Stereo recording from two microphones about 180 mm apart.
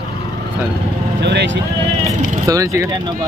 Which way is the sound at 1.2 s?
70° right (ahead or behind).